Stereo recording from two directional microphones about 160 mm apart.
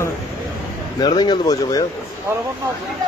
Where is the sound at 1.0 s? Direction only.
25° left (ahead or behind).